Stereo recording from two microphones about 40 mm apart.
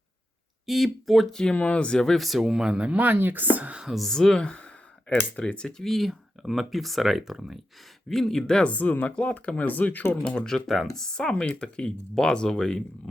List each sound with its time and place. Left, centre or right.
0.7 s speech: centre
1.3 s speech: centre
1.5 s speech: left
2.1 s speech: centre
2.5 s speech: centre
2.9 s speech: right
3.5 s speech: right
4.1 s speech: centre
4.4 s speech: left
5.6 s speech: centre
8.1 s speech: centre
8.6 s speech: left
10.2 s speech: centre